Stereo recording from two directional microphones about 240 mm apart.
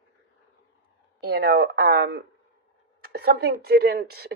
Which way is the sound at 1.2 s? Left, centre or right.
Right.